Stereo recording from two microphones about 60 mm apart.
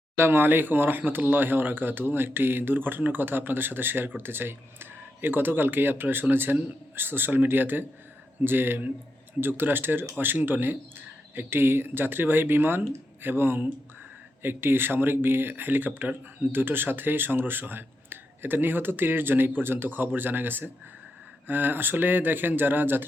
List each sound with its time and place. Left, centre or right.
0.2 s speech: right